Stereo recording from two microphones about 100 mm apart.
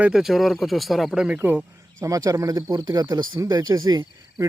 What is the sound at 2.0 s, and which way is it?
Speech, 35° right (ahead or behind).